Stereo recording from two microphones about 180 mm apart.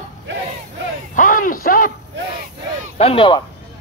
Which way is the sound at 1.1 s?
50° left (ahead or behind).